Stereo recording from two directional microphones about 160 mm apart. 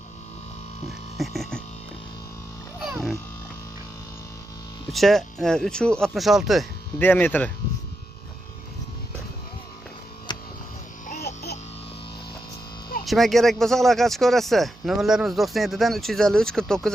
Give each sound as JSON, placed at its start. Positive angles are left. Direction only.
{"t": 1.1, "sound": "music", "side_deg": 0}
{"t": 2.8, "sound": "a sound", "side_deg": 0}
{"t": 4.9, "sound": "speech", "side_deg": 0}
{"t": 7.0, "sound": "speech", "side_deg": 10}
{"t": 10.3, "sound": "a sound", "side_deg": 25}
{"t": 13.1, "sound": "speech", "side_deg": 0}